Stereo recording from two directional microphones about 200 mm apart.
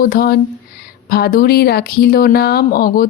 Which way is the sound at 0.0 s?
45° left (ahead or behind).